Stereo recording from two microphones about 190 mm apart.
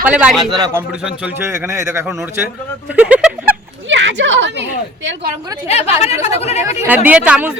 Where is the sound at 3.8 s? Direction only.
75° right (ahead or behind).